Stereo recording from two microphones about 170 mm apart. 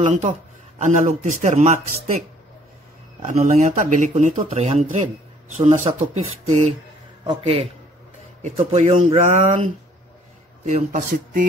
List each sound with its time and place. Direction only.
0.0 s speech: 45° right (ahead or behind)
7.2 s speech: 30° right (ahead or behind)
8.4 s speech: 45° right (ahead or behind)
10.6 s speech: 45° right (ahead or behind)